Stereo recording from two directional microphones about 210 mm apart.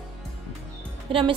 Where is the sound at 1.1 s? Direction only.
25° right (ahead or behind).